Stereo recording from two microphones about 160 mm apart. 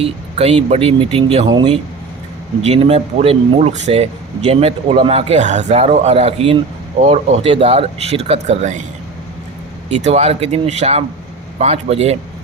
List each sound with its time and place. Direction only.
0.0 s speech: 40° right (ahead or behind)
9.9 s speech: 45° right (ahead or behind)